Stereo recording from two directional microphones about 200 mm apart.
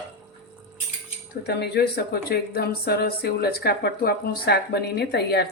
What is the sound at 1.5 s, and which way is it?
A woman's voice, 55° left (ahead or behind).